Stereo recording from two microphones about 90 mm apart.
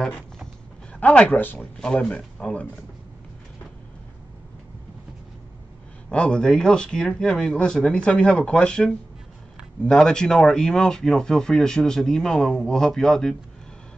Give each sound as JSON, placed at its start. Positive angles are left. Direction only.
{"t": 0.0, "sound": "a sound", "side_deg": 5}
{"t": 0.9, "sound": "speech", "side_deg": 15}
{"t": 6.0, "sound": "speech", "side_deg": 10}